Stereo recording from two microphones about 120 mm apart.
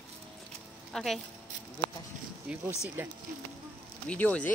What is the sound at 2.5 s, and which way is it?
Speech, 5° right (ahead or behind).